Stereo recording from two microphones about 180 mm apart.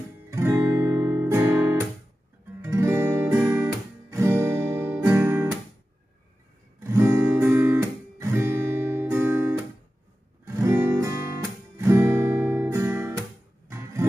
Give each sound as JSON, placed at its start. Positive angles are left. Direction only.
{"t": 0.3, "sound": "guitar", "side_deg": -15}
{"t": 6.8, "sound": "guitar", "side_deg": -15}
{"t": 10.4, "sound": "music", "side_deg": -15}
{"t": 11.7, "sound": "guitar", "side_deg": -15}
{"t": 13.7, "sound": "music", "side_deg": -15}